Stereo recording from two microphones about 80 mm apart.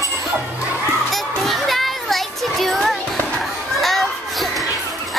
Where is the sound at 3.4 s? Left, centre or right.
Centre.